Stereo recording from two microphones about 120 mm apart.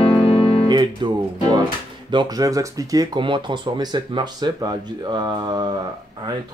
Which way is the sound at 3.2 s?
40° right (ahead or behind).